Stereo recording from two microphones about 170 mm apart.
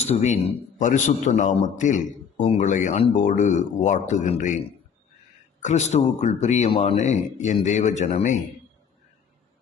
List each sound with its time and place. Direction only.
0.0 s a man's voice: 40° left (ahead or behind)
5.6 s a man's voice: 40° left (ahead or behind)